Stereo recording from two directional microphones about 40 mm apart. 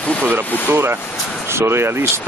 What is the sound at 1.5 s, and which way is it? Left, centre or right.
Speech, right.